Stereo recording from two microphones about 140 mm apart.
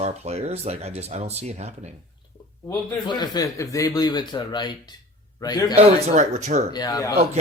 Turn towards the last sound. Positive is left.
turn(degrees=25)  # may be behind; listen again after turning